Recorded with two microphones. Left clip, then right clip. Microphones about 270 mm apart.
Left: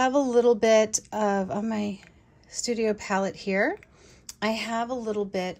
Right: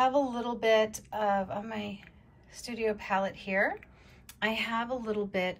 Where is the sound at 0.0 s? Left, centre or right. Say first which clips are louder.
Left 6 dB; left.